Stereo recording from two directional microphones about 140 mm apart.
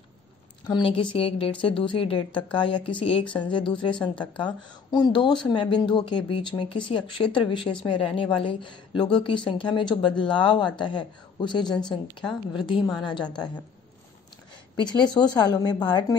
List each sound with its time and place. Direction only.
0.7 s a woman's voice: 35° left (ahead or behind)
4.9 s a woman's voice: 30° left (ahead or behind)
14.8 s a woman's voice: 30° left (ahead or behind)